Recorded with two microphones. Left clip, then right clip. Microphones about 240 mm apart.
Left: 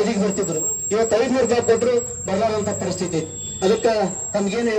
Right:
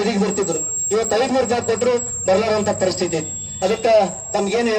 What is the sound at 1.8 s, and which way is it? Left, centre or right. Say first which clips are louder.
Speech: right 1 dB; right.